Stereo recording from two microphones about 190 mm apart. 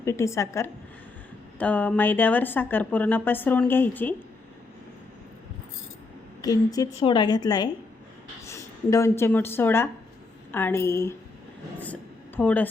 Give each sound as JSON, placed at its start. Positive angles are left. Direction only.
{"t": 0.0, "sound": "speech", "side_deg": 15}
{"t": 6.4, "sound": "a woman's voice", "side_deg": 20}
{"t": 12.4, "sound": "speech", "side_deg": 10}